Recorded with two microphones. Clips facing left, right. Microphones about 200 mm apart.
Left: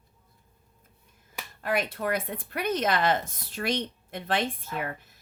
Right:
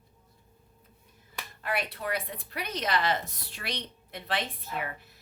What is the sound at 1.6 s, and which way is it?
A woman's voice, 45° left (ahead or behind).